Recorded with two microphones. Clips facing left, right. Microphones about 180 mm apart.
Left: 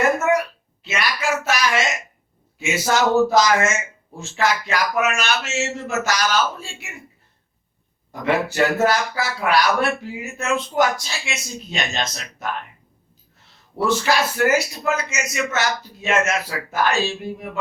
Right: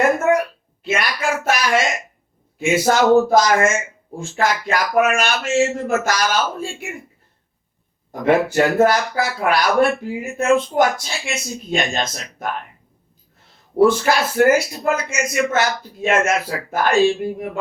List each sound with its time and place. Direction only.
0.9 s speech: 50° right (ahead or behind)
8.1 s speech: 50° right (ahead or behind)
13.7 s speech: 50° right (ahead or behind)